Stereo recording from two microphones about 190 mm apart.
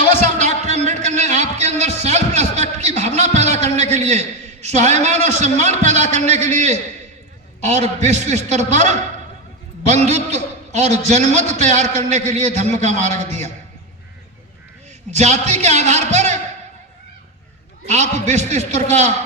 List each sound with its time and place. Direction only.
0.2 s a sound: 40° right (ahead or behind)
7.6 s a man's voice: 35° right (ahead or behind)
15.1 s a man's voice: 35° right (ahead or behind)
17.8 s a man's voice: 35° right (ahead or behind)